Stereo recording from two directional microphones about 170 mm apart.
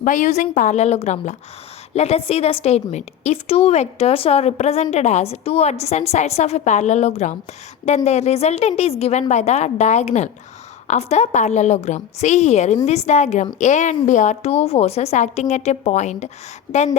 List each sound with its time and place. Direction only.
0.0 s a woman's voice: 45° left (ahead or behind)